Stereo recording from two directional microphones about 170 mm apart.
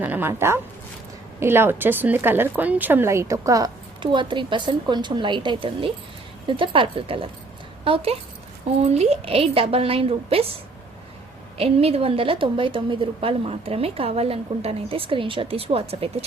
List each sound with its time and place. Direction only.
0.0 s a woman's voice: 10° right (ahead or behind); by 10.5 s 35° right (ahead or behind)
11.5 s a woman's voice: 35° right (ahead or behind)